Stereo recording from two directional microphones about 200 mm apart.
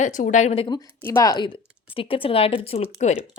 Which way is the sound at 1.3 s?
25° left (ahead or behind).